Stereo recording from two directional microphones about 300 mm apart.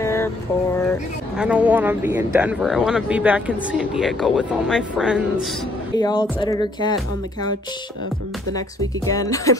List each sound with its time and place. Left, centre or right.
0.0 s mantra: centre
1.4 s speech: centre
5.9 s speech: centre
8.5 s speech: centre